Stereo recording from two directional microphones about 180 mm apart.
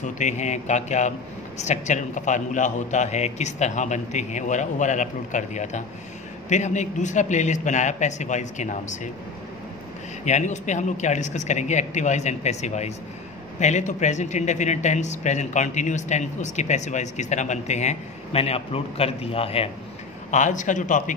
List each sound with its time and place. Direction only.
0.0 s a man's voice: 40° left (ahead or behind)
10.2 s a man's voice: 40° left (ahead or behind)
20.2 s a man's voice: 45° left (ahead or behind)